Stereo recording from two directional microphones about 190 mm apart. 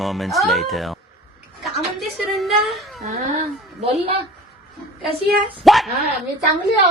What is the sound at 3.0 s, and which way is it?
A woman's voice, 35° right (ahead or behind).